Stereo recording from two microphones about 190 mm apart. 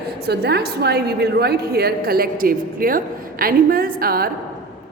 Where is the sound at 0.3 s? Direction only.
60° right (ahead or behind).